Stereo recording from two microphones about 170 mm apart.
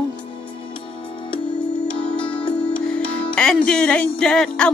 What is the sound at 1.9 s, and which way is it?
Music, 30° left (ahead or behind).